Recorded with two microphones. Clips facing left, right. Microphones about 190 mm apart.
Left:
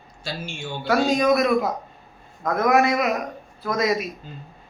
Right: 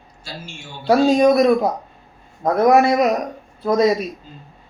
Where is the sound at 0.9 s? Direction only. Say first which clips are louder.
Right 6 dB; 30° right (ahead or behind).